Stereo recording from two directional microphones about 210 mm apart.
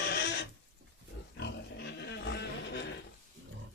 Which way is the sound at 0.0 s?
50° left (ahead or behind).